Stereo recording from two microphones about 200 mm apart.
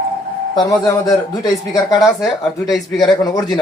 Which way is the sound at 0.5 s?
20° left (ahead or behind).